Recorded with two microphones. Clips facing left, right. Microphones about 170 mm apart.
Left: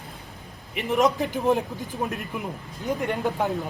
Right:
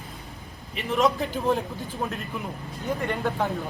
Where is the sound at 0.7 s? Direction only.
15° left (ahead or behind).